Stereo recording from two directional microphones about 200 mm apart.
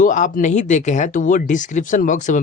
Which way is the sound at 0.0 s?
40° left (ahead or behind).